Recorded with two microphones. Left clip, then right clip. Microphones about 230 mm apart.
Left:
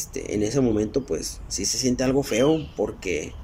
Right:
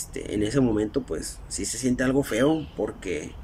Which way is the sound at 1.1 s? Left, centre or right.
Right.